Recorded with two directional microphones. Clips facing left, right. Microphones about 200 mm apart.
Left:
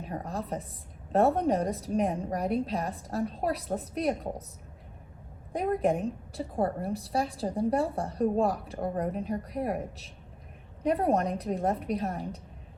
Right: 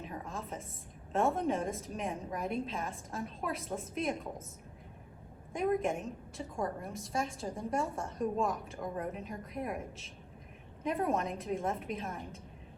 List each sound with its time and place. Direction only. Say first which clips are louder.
0.0 s a woman's voice: left 6 dB; 40° left (ahead or behind)
5.5 s a woman's voice: left 4 dB; 35° left (ahead or behind)